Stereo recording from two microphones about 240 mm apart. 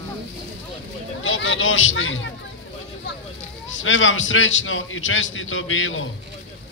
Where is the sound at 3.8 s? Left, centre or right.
Left.